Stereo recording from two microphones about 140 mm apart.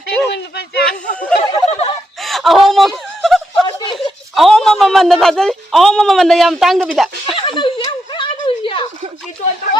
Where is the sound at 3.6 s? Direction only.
35° left (ahead or behind).